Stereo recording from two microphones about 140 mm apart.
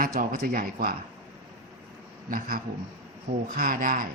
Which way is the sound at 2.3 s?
90° right.